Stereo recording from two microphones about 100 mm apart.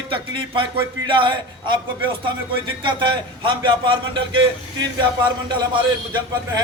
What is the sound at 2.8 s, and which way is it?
A man's voice, 55° right (ahead or behind).